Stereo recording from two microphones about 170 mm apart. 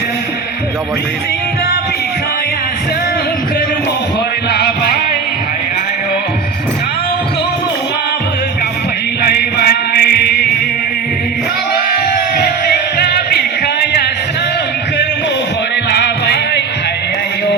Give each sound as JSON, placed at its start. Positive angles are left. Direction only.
{"t": 4.5, "sound": "music", "side_deg": 70}
{"t": 9.2, "sound": "chant", "side_deg": 65}
{"t": 12.6, "sound": "music", "side_deg": 70}
{"t": 15.9, "sound": "music", "side_deg": 75}